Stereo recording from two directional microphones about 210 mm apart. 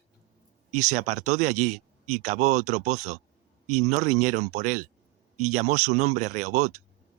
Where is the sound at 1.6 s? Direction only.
35° right (ahead or behind).